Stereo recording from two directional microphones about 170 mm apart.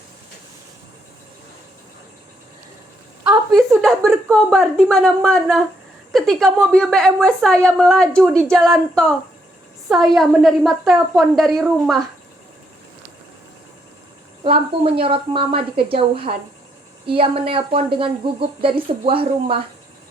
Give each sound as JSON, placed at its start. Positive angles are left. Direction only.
{"t": 3.2, "sound": "a woman's voice", "side_deg": 0}
{"t": 14.4, "sound": "a woman's voice", "side_deg": -30}